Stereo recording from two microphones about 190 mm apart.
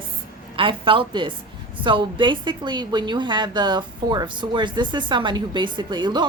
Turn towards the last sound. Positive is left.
turn(degrees=-25)  # may be behind; listen again after turning